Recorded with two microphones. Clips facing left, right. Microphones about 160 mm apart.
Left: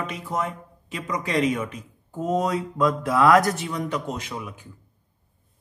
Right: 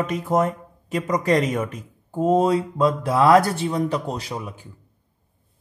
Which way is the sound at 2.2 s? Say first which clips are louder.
Right 6 dB; 30° right (ahead or behind).